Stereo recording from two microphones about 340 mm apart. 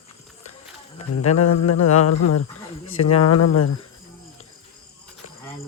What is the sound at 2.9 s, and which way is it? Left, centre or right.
Speech, left.